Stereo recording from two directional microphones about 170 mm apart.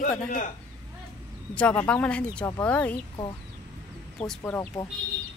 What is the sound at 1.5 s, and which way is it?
Speech, 10° left (ahead or behind).